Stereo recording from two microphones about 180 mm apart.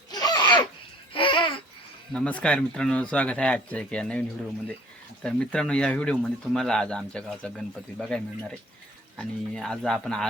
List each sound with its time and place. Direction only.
0.1 s laughter: 20° left (ahead or behind)
1.1 s babbling: 30° left (ahead or behind)
2.1 s speech: 5° left (ahead or behind)